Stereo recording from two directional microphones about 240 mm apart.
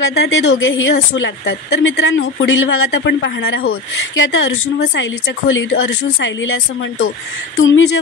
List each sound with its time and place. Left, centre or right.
0.1 s a woman's voice: left